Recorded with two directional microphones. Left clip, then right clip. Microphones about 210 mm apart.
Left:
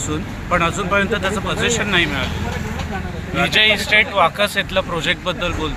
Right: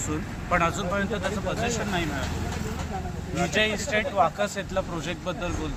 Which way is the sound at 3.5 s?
25° left (ahead or behind).